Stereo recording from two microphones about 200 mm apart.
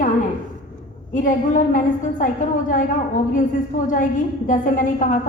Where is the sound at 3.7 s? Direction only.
40° left (ahead or behind).